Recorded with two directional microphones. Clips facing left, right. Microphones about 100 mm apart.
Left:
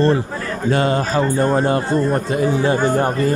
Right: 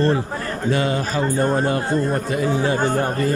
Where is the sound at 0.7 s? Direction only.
40° left (ahead or behind).